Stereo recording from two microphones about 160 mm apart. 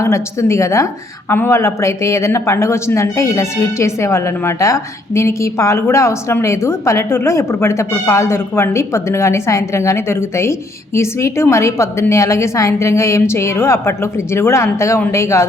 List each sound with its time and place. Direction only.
0.0 s speech: 15° left (ahead or behind)